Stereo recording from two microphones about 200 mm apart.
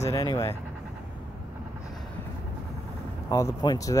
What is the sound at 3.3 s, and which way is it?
Speech, 20° left (ahead or behind).